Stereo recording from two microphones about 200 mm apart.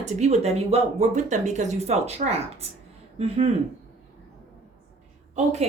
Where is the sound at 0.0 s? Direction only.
35° right (ahead or behind).